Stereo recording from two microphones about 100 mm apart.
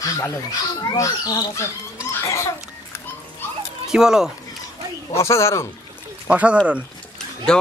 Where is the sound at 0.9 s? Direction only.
40° left (ahead or behind).